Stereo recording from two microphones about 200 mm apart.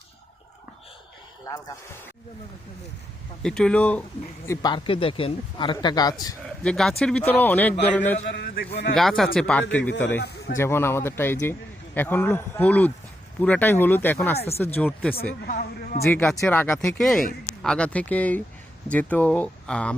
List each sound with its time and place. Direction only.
1.5 s a man's voice: 20° left (ahead or behind)
3.4 s speech: 5° left (ahead or behind)
4.4 s speech: 20° left (ahead or behind)
6.6 s a man's voice: 5° left (ahead or behind)
8.2 s a man's voice: 50° left (ahead or behind)
9.0 s speech: centre (ahead or behind)
10.2 s a man's voice: 55° left (ahead or behind)
10.6 s a man's voice: 10° left (ahead or behind)
14.3 s speech: 30° left (ahead or behind)
14.8 s a man's voice: 5° left (ahead or behind)
15.4 s a man's voice: 40° left (ahead or behind)
16.0 s a man's voice: 5° left (ahead or behind)